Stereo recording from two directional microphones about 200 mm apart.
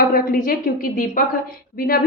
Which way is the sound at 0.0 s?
45° left (ahead or behind).